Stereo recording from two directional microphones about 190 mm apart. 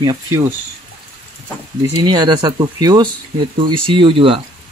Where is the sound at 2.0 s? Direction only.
25° right (ahead or behind).